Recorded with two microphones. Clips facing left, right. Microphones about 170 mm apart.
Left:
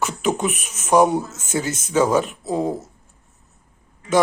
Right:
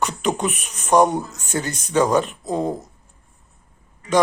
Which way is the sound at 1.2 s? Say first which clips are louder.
Left 2 dB; 15° right (ahead or behind).